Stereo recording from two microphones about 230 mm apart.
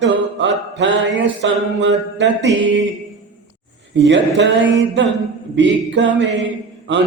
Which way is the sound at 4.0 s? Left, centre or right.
Right.